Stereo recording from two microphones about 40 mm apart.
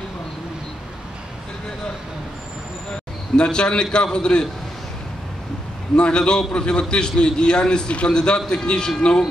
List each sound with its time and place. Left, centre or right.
3.3 s a man's voice: left
5.9 s a man's voice: left